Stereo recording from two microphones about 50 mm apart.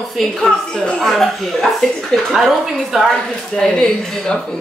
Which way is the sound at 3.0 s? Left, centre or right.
Centre.